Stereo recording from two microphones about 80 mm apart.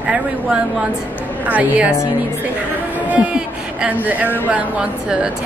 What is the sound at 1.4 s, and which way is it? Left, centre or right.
Speech, centre.